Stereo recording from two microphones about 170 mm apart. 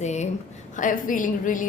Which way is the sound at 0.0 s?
45° left (ahead or behind).